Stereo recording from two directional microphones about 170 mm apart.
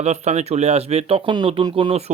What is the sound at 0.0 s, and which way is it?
Speech, 40° right (ahead or behind).